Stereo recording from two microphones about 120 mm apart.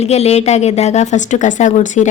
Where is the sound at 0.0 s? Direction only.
60° left (ahead or behind).